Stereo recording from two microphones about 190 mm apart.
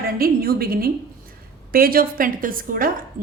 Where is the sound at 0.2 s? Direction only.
50° right (ahead or behind).